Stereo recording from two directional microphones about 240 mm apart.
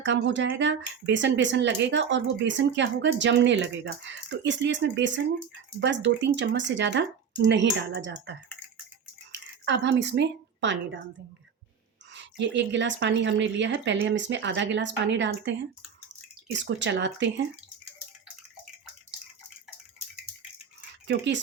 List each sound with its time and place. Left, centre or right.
0.0 s speech: right
9.6 s a woman's voice: right
12.1 s speech: right
21.1 s speech: right